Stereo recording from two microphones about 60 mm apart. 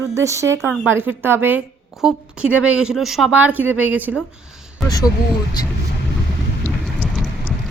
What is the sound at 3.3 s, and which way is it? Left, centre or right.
Speech, right.